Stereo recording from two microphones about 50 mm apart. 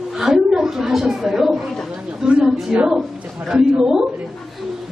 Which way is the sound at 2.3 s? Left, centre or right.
Centre.